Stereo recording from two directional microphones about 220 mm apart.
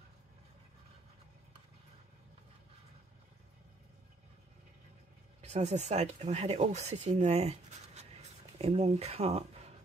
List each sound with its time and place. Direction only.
5.4 s speech: 30° right (ahead or behind)